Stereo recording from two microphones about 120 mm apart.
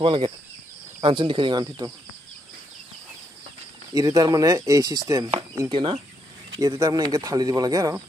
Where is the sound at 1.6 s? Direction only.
30° right (ahead or behind).